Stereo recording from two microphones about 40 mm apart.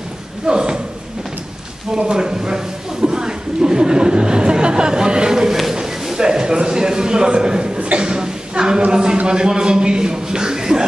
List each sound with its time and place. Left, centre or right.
0.5 s speech: right
1.9 s a sound: centre
8.9 s a man's voice: centre